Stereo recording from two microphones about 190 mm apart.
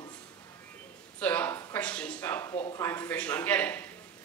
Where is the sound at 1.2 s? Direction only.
10° left (ahead or behind).